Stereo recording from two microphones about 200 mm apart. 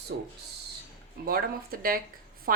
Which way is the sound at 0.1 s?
50° right (ahead or behind).